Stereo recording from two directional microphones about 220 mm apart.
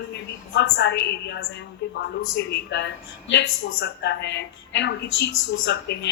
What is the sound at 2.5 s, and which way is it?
A woman's voice, 50° left (ahead or behind).